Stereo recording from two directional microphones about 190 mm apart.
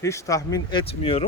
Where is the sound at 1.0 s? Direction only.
30° left (ahead or behind).